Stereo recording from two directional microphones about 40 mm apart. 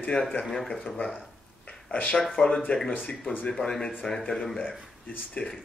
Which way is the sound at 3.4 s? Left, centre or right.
Centre.